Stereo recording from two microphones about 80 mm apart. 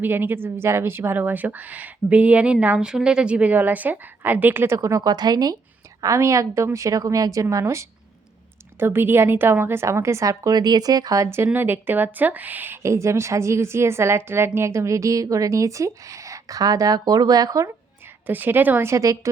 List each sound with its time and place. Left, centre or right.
0.0 s a woman's voice: right
4.8 s speech: right
5.0 s a woman's voice: right
6.0 s a woman's voice: right
11.5 s a woman's voice: right
12.8 s a woman's voice: right
18.3 s a woman's voice: right
18.9 s a woman's voice: right